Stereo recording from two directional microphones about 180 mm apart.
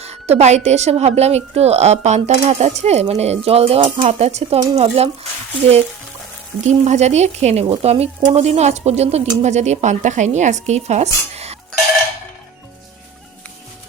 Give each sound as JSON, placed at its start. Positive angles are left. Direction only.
{"t": 0.0, "sound": "a woman's voice", "side_deg": -35}
{"t": 6.7, "sound": "a woman's voice", "side_deg": -40}